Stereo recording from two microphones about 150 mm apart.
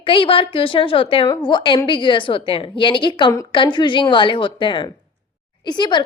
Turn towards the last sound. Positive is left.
turn(degrees=30)  # may be behind; listen again after turning